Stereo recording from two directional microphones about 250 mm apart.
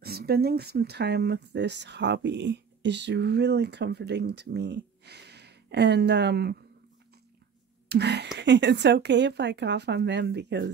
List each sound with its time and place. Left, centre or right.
0.0 s speech: right
7.9 s speech: right